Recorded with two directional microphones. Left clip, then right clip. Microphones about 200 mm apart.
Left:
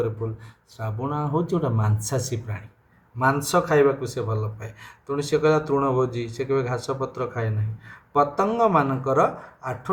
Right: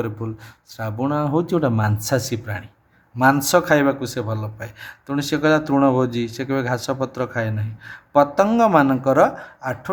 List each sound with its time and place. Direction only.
0.8 s speech: 55° right (ahead or behind)
3.2 s speech: 55° right (ahead or behind)